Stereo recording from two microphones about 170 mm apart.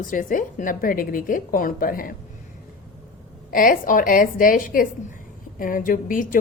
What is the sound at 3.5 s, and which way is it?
A woman's voice, 55° left (ahead or behind).